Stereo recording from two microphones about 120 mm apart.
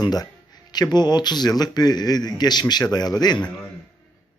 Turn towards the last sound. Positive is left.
turn(degrees=35)  # may be behind; listen again after turning